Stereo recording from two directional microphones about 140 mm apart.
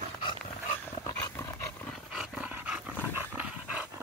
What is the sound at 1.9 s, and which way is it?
Dog, centre (ahead or behind).